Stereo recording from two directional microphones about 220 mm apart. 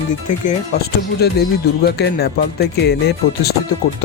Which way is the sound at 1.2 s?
45° left (ahead or behind).